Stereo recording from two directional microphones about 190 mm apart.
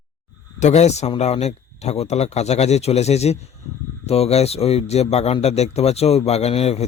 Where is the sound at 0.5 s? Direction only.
35° left (ahead or behind).